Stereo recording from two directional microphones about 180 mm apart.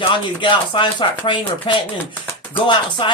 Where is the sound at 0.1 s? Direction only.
30° left (ahead or behind).